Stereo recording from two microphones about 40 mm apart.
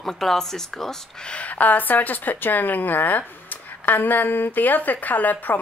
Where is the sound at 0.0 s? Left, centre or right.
Centre.